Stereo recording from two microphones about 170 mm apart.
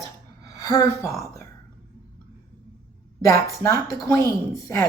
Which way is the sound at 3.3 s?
20° left (ahead or behind).